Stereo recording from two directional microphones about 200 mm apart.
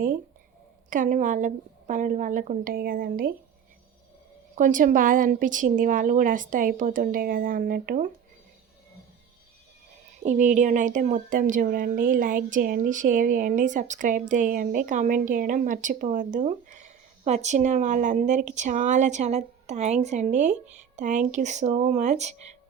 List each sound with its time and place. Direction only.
0.9 s speech: 40° right (ahead or behind)
4.5 s speech: 40° right (ahead or behind)
10.2 s speech: 40° right (ahead or behind)